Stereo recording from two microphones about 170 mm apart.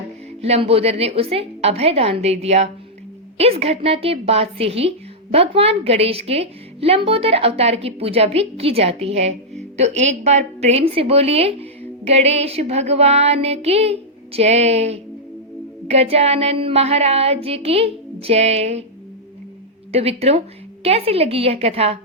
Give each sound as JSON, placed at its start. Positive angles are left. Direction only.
{"t": 0.4, "sound": "a woman's voice", "side_deg": -35}
{"t": 19.9, "sound": "a woman's voice", "side_deg": -35}